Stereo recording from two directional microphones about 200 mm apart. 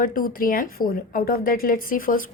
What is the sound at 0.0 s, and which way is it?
A woman's voice, 45° left (ahead or behind).